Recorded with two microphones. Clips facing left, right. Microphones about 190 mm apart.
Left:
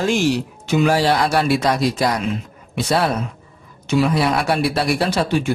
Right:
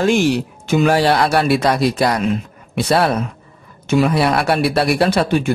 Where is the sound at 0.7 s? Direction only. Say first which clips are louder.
Right 2 dB; 55° right (ahead or behind).